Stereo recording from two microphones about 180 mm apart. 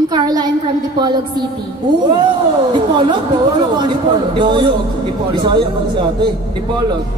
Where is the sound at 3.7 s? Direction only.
25° right (ahead or behind).